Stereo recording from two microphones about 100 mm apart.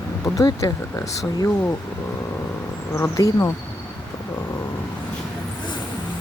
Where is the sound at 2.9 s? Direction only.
30° left (ahead or behind).